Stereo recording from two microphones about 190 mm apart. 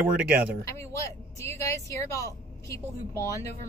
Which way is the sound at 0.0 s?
5° right (ahead or behind).